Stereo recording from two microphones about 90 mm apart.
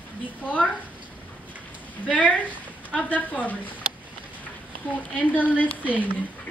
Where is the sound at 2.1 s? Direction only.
15° left (ahead or behind).